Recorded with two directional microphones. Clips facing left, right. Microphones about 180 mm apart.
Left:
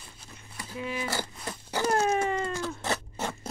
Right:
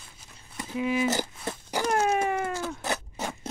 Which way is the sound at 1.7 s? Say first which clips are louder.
Even; 15° right (ahead or behind).